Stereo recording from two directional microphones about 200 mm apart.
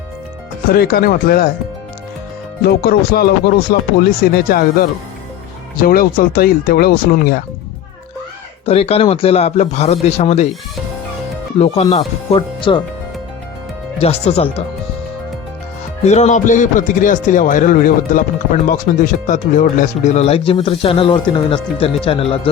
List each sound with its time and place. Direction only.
0.7 s speech: 50° left (ahead or behind)
2.6 s speech: 50° left (ahead or behind)
8.6 s speech: 30° left (ahead or behind)
11.6 s speech: 30° left (ahead or behind)
14.0 s speech: 30° left (ahead or behind)
16.0 s speech: 35° left (ahead or behind)